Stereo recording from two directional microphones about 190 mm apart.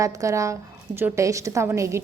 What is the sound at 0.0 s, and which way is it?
A woman's voice, 15° right (ahead or behind).